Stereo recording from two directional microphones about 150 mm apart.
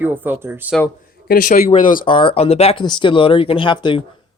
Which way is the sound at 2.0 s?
35° left (ahead or behind).